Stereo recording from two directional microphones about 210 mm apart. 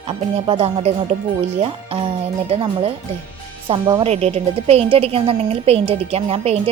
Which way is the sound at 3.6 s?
20° right (ahead or behind).